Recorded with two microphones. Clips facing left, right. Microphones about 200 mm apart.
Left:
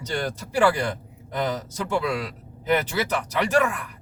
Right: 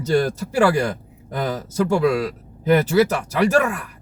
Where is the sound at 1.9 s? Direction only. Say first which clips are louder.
Right 5 dB; 45° right (ahead or behind).